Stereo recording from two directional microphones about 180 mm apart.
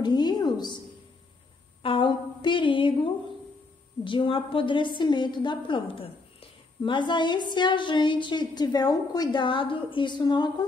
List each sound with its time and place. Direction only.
0.0 s a woman's voice: 25° left (ahead or behind)
1.8 s a woman's voice: 30° left (ahead or behind)